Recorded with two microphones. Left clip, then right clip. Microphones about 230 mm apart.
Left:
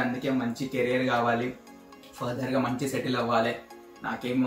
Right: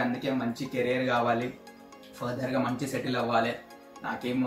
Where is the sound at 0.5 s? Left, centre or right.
Centre.